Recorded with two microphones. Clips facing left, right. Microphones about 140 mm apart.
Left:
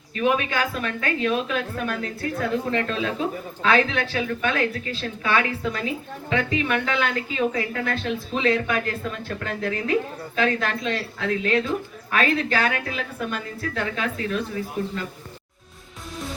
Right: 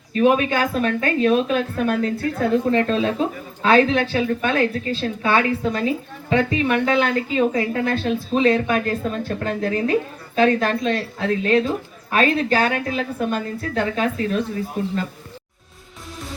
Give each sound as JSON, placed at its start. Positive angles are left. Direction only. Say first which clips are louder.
{"t": 0.1, "sound": "a woman's voice", "louder": "right 6 dB", "side_deg": -30}